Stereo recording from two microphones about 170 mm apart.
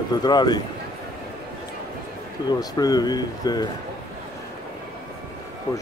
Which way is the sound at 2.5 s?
20° left (ahead or behind).